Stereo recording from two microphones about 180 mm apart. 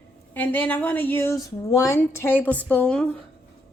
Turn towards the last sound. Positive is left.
turn(degrees=5)  # may be behind; listen again after turning